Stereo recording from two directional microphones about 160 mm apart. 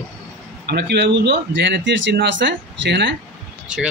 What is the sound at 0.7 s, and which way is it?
A man's voice, 90° right.